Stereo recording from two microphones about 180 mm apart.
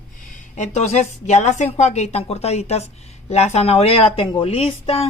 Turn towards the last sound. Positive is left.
turn(degrees=35)  # may be behind; listen again after turning